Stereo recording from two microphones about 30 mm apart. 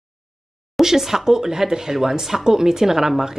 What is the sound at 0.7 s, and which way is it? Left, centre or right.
Speech, centre.